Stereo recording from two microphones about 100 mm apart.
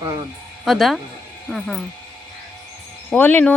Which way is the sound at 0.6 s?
Centre (ahead or behind).